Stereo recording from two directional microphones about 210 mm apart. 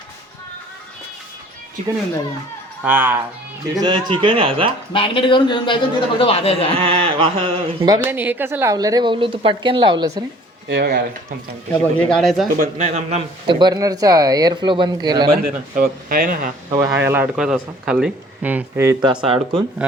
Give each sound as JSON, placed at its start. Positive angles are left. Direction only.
{"t": 2.8, "sound": "speech", "side_deg": -10}
{"t": 3.8, "sound": "speech", "side_deg": -20}
{"t": 4.9, "sound": "a man's voice", "side_deg": 25}
{"t": 6.7, "sound": "speech", "side_deg": -25}
{"t": 10.7, "sound": "speech", "side_deg": -50}
{"t": 11.9, "sound": "speech", "side_deg": 5}
{"t": 12.5, "sound": "speech", "side_deg": -35}
{"t": 15.3, "sound": "speech", "side_deg": -45}
{"t": 16.6, "sound": "speech", "side_deg": -15}